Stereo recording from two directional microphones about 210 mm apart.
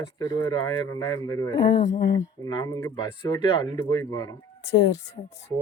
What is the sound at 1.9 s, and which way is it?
Speech, 55° left (ahead or behind).